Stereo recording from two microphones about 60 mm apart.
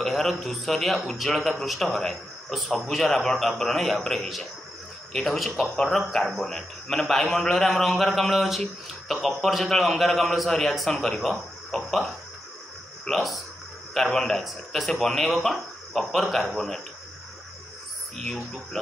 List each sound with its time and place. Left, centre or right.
0.0 s a man's voice: centre
13.1 s a man's voice: centre
18.2 s speech: centre